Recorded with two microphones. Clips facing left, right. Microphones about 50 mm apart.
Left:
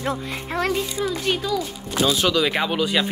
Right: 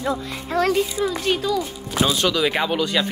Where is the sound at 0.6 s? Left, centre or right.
Centre.